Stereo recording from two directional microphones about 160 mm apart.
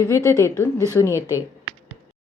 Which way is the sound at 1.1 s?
15° right (ahead or behind).